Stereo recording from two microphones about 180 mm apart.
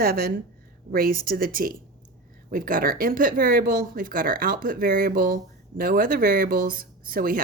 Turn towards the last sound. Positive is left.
turn(degrees=-55)  # may be behind; listen again after turning